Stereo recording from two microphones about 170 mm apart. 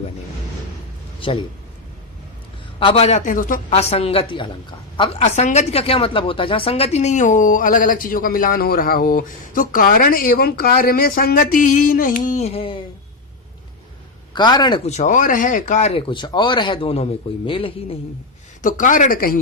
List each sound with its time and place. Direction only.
2.7 s speech: 35° left (ahead or behind); by 3.6 s 50° left (ahead or behind)
3.8 s speech: 35° left (ahead or behind)
14.3 s speech: 25° left (ahead or behind)
14.8 s speech: 45° left (ahead or behind)
16.0 s speech: 30° left (ahead or behind)
18.6 s speech: 50° left (ahead or behind)